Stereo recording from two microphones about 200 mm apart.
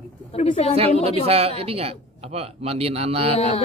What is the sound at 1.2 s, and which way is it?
A man's voice, 30° right (ahead or behind).